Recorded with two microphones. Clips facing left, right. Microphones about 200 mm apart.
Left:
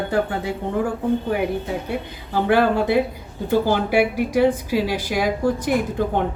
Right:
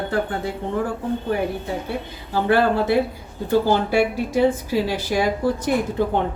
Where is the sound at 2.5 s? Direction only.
15° left (ahead or behind).